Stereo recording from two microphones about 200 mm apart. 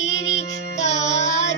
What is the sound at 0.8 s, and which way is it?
Music, 35° left (ahead or behind).